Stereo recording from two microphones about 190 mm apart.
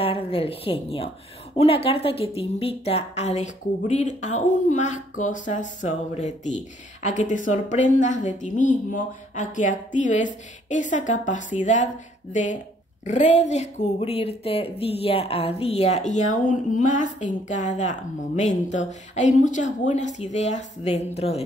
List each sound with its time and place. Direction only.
0.0 s a woman's voice: 30° left (ahead or behind)